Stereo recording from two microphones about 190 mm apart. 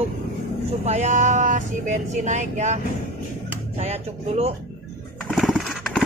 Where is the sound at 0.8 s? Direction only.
35° right (ahead or behind).